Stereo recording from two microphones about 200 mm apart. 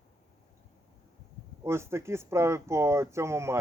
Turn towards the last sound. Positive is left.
turn(degrees=-15)  # may be behind; listen again after turning